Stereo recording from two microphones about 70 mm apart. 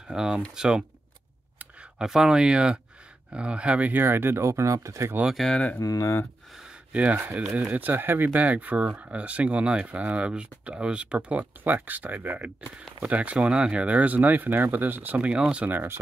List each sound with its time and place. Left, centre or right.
0.1 s speech: centre
2.0 s speech: centre
4.0 s speech: right
5.5 s speech: left
5.8 s speech: left
6.9 s speech: right